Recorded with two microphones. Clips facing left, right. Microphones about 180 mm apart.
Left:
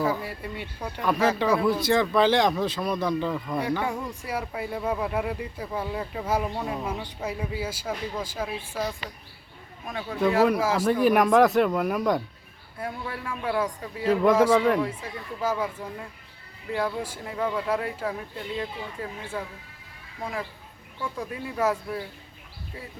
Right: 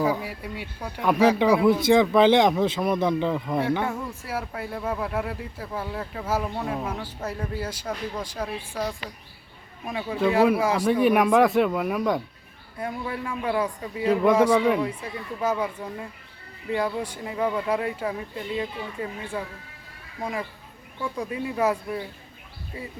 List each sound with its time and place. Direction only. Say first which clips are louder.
0.0 s speech: right 2 dB; 15° right (ahead or behind)
4.1 s a man's voice: even; 5° right (ahead or behind)
21.0 s a man's voice: right 3 dB; centre (ahead or behind)